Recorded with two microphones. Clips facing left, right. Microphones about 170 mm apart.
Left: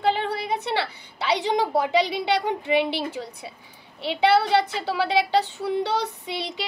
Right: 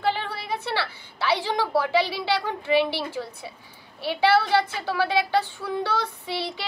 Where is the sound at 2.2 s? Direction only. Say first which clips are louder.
Left 2 dB; 20° left (ahead or behind).